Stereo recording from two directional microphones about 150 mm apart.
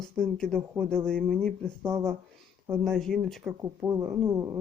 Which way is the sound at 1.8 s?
20° right (ahead or behind).